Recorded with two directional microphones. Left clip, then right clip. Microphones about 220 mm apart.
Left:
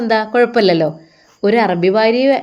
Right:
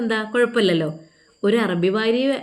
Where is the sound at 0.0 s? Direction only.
5° left (ahead or behind).